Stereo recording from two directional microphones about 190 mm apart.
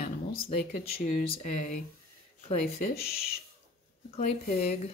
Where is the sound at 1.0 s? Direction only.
45° left (ahead or behind).